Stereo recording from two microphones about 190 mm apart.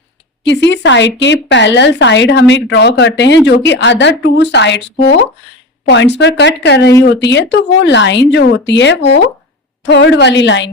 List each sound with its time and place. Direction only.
0.4 s speech: 65° left (ahead or behind)